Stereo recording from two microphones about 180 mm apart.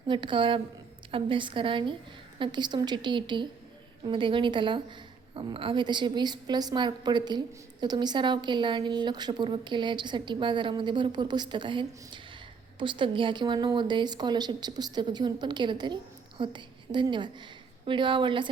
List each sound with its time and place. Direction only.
0.1 s a woman's voice: 25° right (ahead or behind)